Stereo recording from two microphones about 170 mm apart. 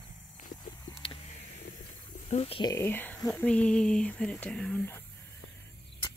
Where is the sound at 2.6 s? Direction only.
15° left (ahead or behind).